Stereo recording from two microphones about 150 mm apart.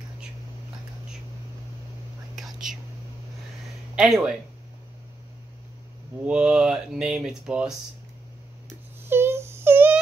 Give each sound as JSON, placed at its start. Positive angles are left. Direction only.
{"t": 2.3, "sound": "whispering", "side_deg": -5}
{"t": 3.9, "sound": "speech", "side_deg": -5}
{"t": 6.2, "sound": "speech", "side_deg": -5}
{"t": 9.0, "sound": "a sound", "side_deg": -15}